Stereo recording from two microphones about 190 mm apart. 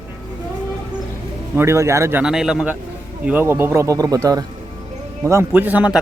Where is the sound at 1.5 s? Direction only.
15° right (ahead or behind).